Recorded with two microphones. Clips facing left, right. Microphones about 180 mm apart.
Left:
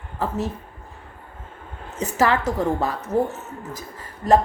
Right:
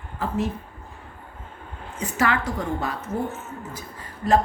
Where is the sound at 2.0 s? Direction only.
40° left (ahead or behind).